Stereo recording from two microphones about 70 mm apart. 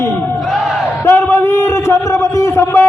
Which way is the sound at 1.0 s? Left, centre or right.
Left.